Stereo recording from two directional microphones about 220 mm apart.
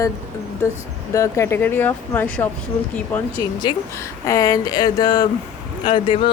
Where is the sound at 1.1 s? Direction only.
15° left (ahead or behind).